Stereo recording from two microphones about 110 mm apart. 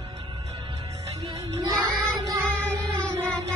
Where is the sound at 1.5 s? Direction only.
35° right (ahead or behind).